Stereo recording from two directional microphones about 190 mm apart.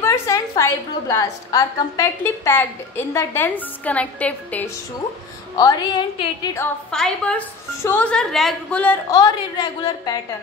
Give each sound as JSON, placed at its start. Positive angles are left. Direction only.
{"t": 0.0, "sound": "a woman's voice", "side_deg": 15}
{"t": 5.6, "sound": "a woman's voice", "side_deg": 20}
{"t": 6.9, "sound": "a woman's voice", "side_deg": 5}
{"t": 9.1, "sound": "a woman's voice", "side_deg": 20}